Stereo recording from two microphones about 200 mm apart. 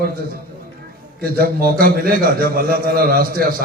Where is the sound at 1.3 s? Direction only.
50° right (ahead or behind).